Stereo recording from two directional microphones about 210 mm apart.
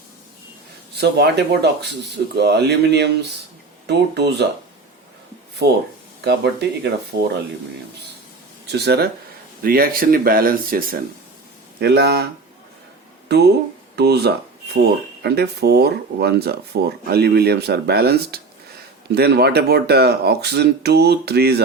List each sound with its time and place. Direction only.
0.9 s speech: 50° right (ahead or behind)
6.2 s speech: 50° right (ahead or behind)
8.6 s speech: 50° right (ahead or behind)